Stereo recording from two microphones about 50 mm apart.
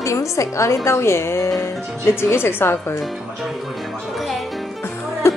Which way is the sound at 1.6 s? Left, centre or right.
Left.